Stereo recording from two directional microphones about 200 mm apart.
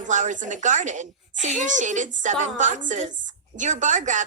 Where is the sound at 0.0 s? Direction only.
40° right (ahead or behind).